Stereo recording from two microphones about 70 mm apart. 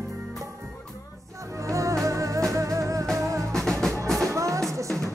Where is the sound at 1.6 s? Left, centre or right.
Right.